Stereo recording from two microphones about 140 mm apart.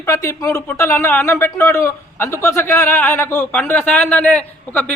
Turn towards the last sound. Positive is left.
turn(degrees=10)  # may be behind; listen again after turning